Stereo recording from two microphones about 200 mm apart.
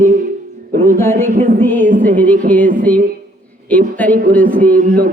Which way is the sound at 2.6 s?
40° right (ahead or behind).